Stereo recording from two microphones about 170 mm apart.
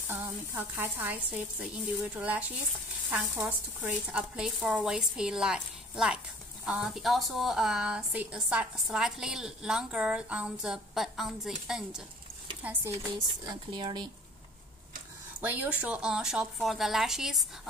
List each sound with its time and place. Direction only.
0.1 s a woman's voice: 10° right (ahead or behind)
12.6 s a woman's voice: 15° right (ahead or behind)
13.5 s speech: 25° right (ahead or behind)
15.4 s speech: 10° right (ahead or behind)